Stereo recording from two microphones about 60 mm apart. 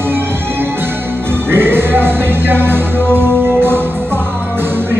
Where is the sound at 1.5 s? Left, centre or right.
Right.